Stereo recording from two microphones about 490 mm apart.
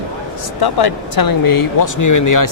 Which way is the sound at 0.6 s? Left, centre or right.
Left.